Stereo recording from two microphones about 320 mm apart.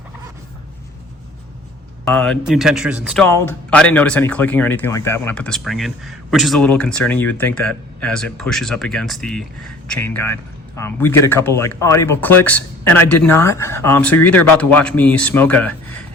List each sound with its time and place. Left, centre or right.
2.0 s speech: centre